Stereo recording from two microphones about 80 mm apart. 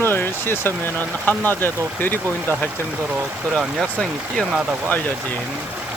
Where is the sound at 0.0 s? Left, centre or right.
Left.